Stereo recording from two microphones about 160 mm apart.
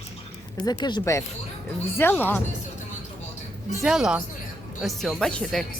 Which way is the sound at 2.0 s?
10° left (ahead or behind).